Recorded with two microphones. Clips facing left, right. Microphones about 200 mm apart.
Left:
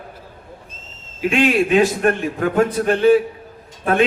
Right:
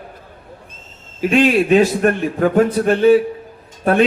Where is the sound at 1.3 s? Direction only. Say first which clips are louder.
Right 3 dB; 45° right (ahead or behind).